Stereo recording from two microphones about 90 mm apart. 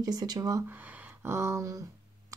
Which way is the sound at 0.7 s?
20° right (ahead or behind).